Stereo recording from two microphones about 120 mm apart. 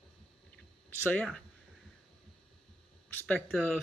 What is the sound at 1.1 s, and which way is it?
Speech, 10° left (ahead or behind).